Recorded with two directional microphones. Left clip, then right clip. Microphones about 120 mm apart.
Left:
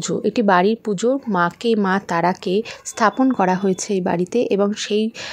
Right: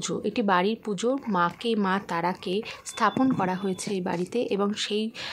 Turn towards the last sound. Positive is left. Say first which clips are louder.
# left 8 dB
turn(degrees=45)  # may be behind; listen again after turning